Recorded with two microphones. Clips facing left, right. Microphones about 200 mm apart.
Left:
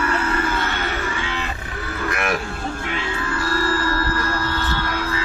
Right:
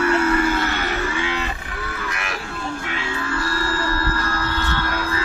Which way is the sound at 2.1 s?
55° left (ahead or behind).